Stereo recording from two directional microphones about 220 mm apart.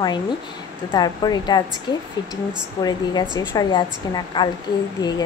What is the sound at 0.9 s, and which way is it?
Speech, 20° left (ahead or behind).